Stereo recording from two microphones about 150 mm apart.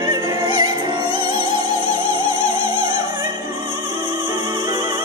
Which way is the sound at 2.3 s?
20° right (ahead or behind).